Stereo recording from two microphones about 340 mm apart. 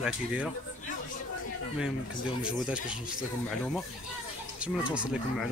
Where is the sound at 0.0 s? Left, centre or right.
Centre.